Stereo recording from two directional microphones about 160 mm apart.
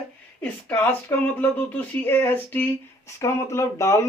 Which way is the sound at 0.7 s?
10° left (ahead or behind).